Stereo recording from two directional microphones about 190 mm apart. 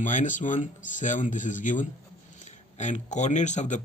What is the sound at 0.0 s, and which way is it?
Speech, 40° left (ahead or behind).